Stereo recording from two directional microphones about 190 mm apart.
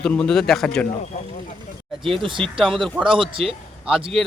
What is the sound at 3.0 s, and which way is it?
Speech, 25° right (ahead or behind).